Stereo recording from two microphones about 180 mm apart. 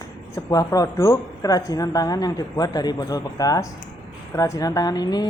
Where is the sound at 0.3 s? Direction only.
20° left (ahead or behind).